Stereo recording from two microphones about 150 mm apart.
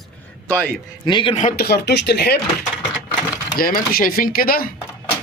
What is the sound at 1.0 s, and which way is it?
Speech, 30° left (ahead or behind).